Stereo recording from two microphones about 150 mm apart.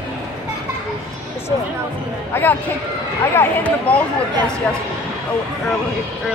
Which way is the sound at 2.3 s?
15° left (ahead or behind).